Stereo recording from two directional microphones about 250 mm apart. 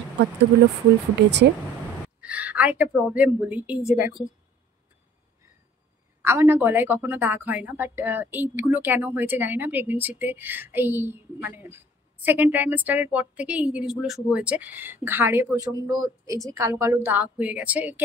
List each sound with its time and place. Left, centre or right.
1.1 s speech: right
2.1 s a woman's voice: centre
6.2 s a woman's voice: centre